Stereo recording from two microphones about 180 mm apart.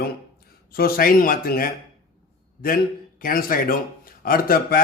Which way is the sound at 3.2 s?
50° left (ahead or behind).